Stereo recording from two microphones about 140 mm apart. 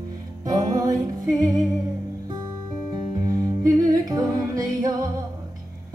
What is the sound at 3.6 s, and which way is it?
Music, 25° right (ahead or behind).